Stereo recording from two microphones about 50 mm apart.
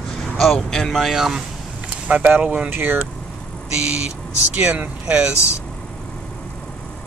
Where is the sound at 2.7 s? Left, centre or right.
Right.